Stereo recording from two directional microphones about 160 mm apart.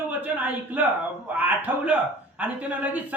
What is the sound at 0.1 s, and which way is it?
Speech, 10° right (ahead or behind).